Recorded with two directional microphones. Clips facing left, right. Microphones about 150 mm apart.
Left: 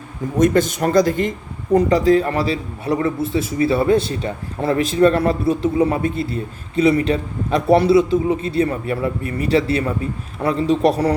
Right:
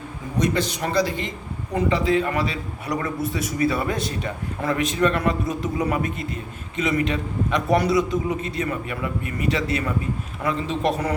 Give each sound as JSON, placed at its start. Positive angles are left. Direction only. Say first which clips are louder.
{"t": 0.3, "sound": "a man's voice", "louder": "left 7 dB", "side_deg": 50}